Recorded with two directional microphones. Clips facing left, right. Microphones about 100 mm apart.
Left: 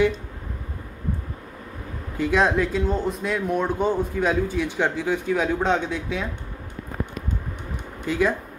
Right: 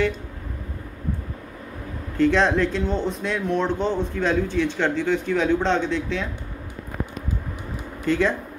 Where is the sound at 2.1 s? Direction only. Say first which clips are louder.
Right 2 dB; 10° left (ahead or behind).